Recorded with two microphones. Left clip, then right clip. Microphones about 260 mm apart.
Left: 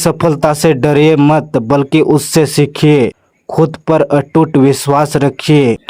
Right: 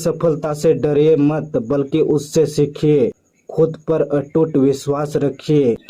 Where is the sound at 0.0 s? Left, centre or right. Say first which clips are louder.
Left 6 dB; left.